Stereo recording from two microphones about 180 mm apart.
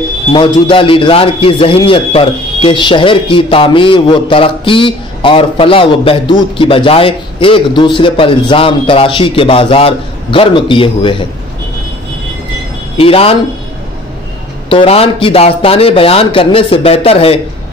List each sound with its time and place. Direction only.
0.3 s a man's voice: 30° left (ahead or behind)
12.9 s speech: 30° left (ahead or behind)
14.7 s speech: 30° left (ahead or behind)